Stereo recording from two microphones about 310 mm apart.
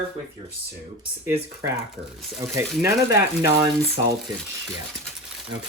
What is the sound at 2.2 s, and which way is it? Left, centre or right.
Speech, centre.